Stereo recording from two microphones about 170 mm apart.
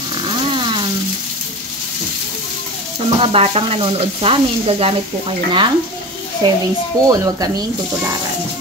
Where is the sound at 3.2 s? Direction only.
35° right (ahead or behind).